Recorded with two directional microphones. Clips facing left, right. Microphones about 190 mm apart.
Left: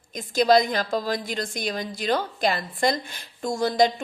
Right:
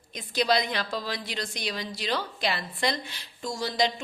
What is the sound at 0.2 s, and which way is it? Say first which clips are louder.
A woman's voice: left 7 dB; 45° left (ahead or behind).